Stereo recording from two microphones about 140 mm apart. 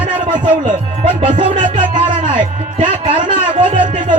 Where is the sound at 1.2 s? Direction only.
45° right (ahead or behind).